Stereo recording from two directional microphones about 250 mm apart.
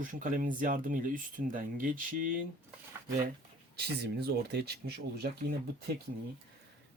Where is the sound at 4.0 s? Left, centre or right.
Right.